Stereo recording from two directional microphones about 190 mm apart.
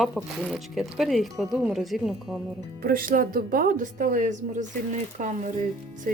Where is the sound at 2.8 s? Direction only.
50° right (ahead or behind).